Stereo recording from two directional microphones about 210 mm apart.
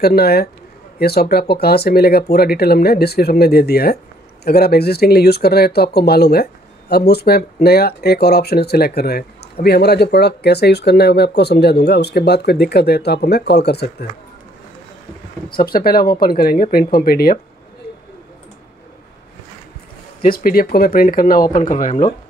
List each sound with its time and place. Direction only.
0.0 s speech: 50° left (ahead or behind)
15.5 s speech: 45° left (ahead or behind)
17.8 s a sound: 45° left (ahead or behind)
20.2 s speech: 45° left (ahead or behind)